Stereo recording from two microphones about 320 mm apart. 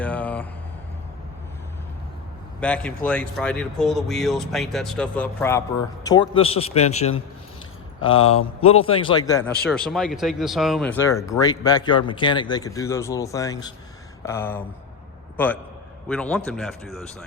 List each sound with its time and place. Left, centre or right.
0.0 s a sound: centre
2.6 s speech: centre
8.1 s speech: centre
9.6 s speech: centre